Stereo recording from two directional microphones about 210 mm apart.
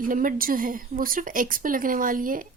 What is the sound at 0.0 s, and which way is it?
A woman's voice, 40° right (ahead or behind).